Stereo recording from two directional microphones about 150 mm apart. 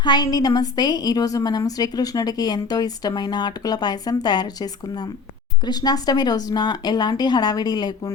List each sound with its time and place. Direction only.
0.0 s a woman's voice: 30° left (ahead or behind)